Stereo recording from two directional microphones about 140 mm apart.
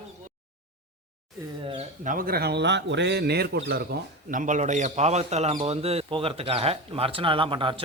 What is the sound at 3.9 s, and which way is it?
Speech, 90° right.